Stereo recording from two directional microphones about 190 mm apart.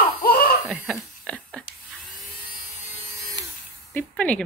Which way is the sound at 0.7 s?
5° left (ahead or behind).